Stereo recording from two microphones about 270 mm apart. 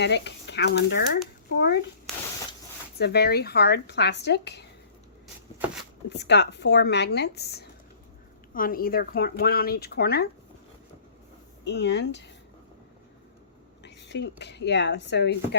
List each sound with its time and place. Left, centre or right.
0.0 s speech: left
2.1 s a sound: centre
3.0 s speech: left
6.1 s speech: left
11.6 s speech: left
13.8 s speech: left